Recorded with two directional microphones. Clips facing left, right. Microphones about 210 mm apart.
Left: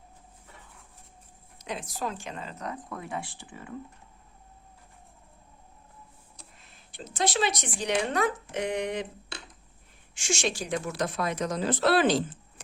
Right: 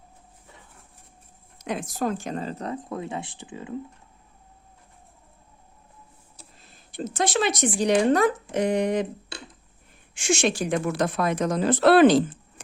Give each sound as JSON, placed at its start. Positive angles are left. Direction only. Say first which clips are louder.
{"t": 1.5, "sound": "speech", "louder": "right 7 dB", "side_deg": -50}
{"t": 6.6, "sound": "speech", "louder": "right 12 dB", "side_deg": -45}
{"t": 10.2, "sound": "a woman's voice", "louder": "right 7 dB", "side_deg": -55}